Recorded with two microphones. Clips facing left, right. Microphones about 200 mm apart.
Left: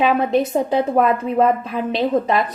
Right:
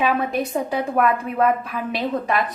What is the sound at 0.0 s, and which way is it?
A woman's voice, 25° left (ahead or behind).